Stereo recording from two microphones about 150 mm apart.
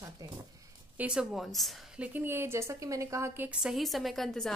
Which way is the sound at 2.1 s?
15° right (ahead or behind).